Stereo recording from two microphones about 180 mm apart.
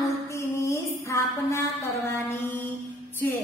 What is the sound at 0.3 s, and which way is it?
Music, 15° left (ahead or behind).